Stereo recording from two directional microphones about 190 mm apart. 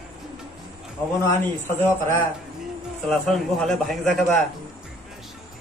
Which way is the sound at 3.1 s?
Centre (ahead or behind).